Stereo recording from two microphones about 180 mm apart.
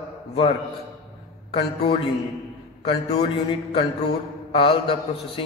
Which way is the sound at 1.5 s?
30° left (ahead or behind).